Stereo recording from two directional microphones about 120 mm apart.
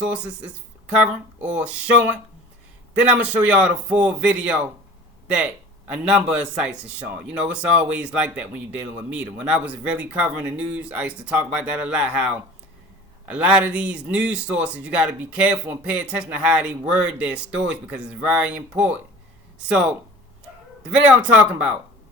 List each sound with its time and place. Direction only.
0.0 s a man's voice: 10° right (ahead or behind)
20.9 s a man's voice: 10° right (ahead or behind)